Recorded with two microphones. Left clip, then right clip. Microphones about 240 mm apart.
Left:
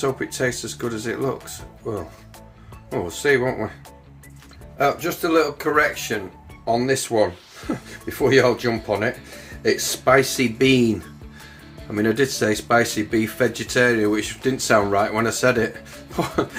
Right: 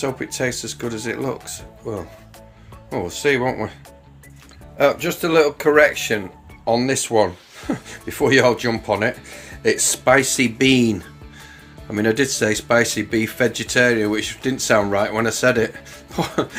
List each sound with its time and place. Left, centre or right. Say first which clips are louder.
0.0 s speech: even; centre
4.8 s speech: right 3 dB; right
6.7 s speech: right 1 dB; right